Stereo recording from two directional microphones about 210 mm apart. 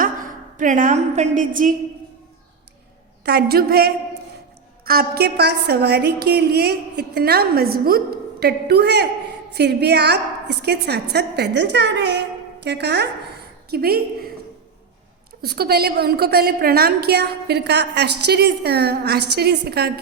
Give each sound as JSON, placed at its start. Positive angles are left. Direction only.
{"t": 0.0, "sound": "a woman's voice", "side_deg": -40}
{"t": 3.2, "sound": "a woman's voice", "side_deg": -50}
{"t": 15.4, "sound": "a woman's voice", "side_deg": -50}